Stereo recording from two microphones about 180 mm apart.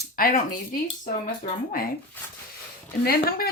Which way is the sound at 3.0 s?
55° left (ahead or behind).